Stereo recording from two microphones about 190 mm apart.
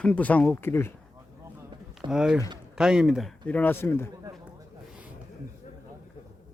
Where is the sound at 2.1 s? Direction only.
5° right (ahead or behind).